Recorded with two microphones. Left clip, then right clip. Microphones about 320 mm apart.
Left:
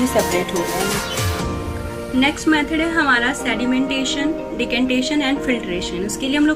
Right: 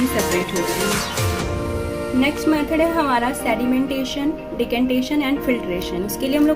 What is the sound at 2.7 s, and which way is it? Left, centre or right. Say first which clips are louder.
A woman's voice: left 1 dB; centre.